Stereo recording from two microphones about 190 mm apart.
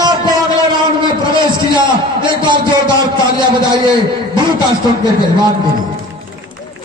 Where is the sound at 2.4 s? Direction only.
25° right (ahead or behind).